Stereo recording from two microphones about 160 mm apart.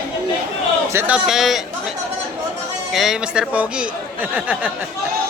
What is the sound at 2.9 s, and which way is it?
Speech, centre (ahead or behind).